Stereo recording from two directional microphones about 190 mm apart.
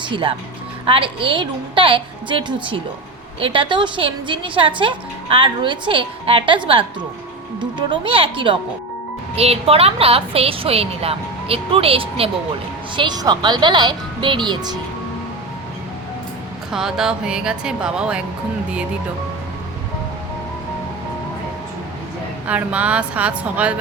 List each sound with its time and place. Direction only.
0.0 s a woman's voice: 25° right (ahead or behind)
16.7 s speech: 5° right (ahead or behind)
22.4 s a woman's voice: 5° right (ahead or behind)